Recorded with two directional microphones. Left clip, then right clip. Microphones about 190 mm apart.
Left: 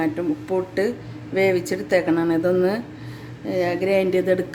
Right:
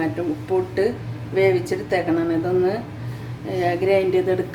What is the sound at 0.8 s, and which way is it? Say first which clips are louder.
Speech: right 2 dB; 40° left (ahead or behind).